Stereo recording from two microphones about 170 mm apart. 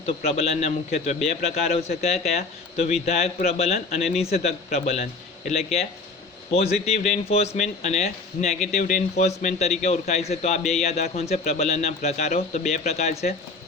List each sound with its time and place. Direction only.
0.0 s a man's voice: 35° left (ahead or behind)
6.5 s a man's voice: 40° left (ahead or behind)